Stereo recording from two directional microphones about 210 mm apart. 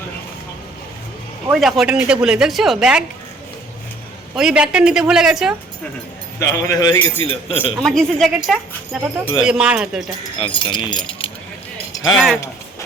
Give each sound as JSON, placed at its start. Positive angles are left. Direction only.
{"t": 1.5, "sound": "speech", "side_deg": 0}
{"t": 4.4, "sound": "speech", "side_deg": -5}
{"t": 6.4, "sound": "speech", "side_deg": 15}
{"t": 7.8, "sound": "speech", "side_deg": 0}
{"t": 10.4, "sound": "speech", "side_deg": 25}
{"t": 12.1, "sound": "speech", "side_deg": 0}